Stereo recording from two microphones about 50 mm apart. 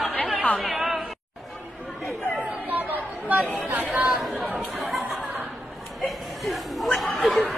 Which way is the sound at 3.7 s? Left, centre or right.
Centre.